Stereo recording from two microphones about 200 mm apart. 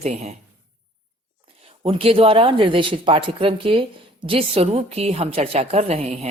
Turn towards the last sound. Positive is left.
turn(degrees=-30)  # may be behind; listen again after turning